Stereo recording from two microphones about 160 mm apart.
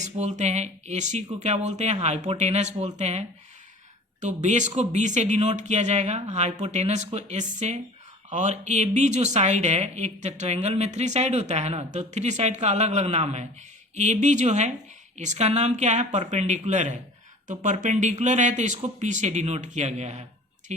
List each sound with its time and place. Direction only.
0.0 s speech: 45° right (ahead or behind)